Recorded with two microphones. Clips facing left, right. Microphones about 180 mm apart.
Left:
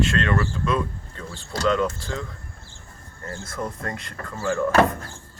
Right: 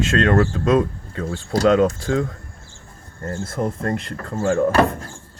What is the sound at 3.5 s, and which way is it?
Speech, 30° right (ahead or behind).